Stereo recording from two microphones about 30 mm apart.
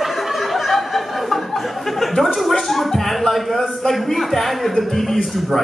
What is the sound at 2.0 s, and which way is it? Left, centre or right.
Gargling, centre.